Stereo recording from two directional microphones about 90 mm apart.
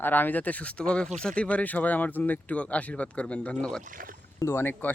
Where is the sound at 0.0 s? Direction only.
20° left (ahead or behind).